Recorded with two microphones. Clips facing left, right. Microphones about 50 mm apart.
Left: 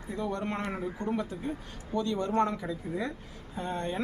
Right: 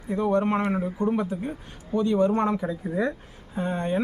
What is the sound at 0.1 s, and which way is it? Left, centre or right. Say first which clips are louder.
Speech: right 10 dB; right.